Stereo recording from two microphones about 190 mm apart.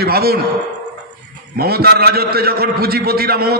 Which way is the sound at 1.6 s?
55° right (ahead or behind).